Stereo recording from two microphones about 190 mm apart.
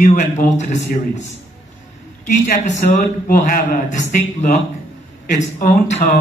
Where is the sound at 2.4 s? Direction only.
40° left (ahead or behind).